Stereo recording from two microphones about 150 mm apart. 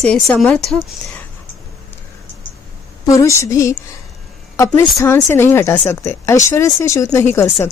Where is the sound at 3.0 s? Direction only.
20° left (ahead or behind).